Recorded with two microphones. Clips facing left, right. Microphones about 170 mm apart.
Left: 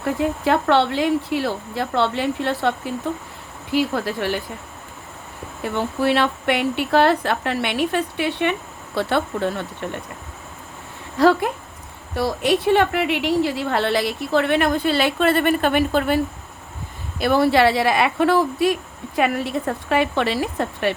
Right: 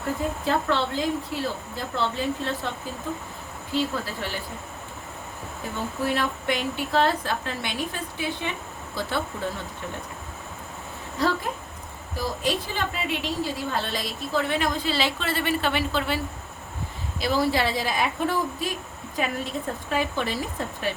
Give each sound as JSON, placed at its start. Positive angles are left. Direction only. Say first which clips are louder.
{"t": 0.2, "sound": "a woman's voice", "louder": "left 7 dB", "side_deg": 75}
{"t": 5.6, "sound": "a woman's voice", "louder": "left 7 dB", "side_deg": 75}
{"t": 11.2, "sound": "a woman's voice", "louder": "left 9 dB", "side_deg": 70}
{"t": 17.2, "sound": "a woman's voice", "louder": "left 7 dB", "side_deg": 60}